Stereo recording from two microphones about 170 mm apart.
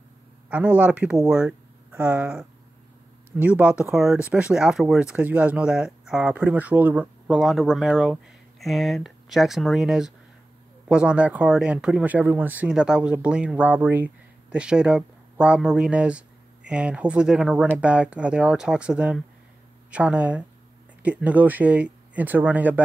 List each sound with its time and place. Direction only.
0.5 s speech: 10° right (ahead or behind)